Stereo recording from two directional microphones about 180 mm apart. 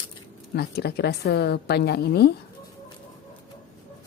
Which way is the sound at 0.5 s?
65° left (ahead or behind).